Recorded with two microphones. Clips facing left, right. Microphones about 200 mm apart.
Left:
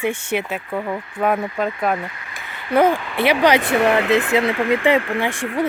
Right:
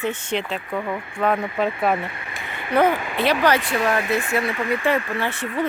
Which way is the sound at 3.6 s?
60° left (ahead or behind).